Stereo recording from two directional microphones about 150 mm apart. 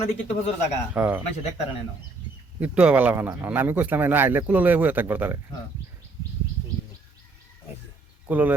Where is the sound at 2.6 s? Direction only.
10° right (ahead or behind).